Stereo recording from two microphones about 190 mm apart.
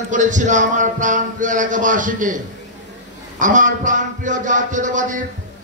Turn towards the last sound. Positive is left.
turn(degrees=-40)  # may be behind; listen again after turning